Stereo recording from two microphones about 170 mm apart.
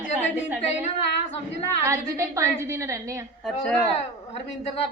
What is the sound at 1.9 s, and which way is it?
A woman's voice, 15° right (ahead or behind).